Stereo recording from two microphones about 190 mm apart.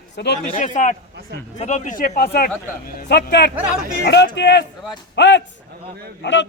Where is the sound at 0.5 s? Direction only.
45° left (ahead or behind).